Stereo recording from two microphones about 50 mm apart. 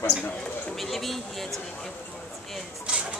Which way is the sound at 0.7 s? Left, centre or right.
Centre.